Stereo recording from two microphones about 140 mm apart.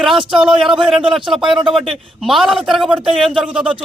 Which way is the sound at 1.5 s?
35° right (ahead or behind).